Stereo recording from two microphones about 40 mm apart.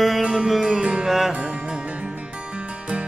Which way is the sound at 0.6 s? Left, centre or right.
Centre.